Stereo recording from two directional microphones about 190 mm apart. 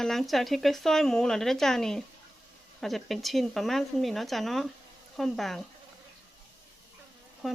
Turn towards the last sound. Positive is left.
turn(degrees=0)  # may be behind; listen again after turning